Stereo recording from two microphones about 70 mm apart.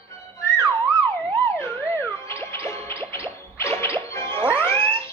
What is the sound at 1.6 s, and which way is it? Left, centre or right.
Music, left.